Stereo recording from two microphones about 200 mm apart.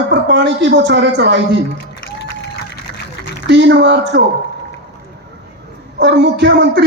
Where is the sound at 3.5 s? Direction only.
60° right (ahead or behind).